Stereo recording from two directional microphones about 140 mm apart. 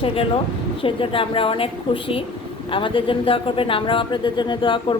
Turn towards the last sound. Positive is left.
turn(degrees=35)  # may be behind; listen again after turning